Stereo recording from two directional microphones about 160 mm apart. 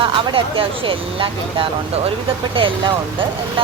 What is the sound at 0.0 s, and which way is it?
Speech, 35° right (ahead or behind).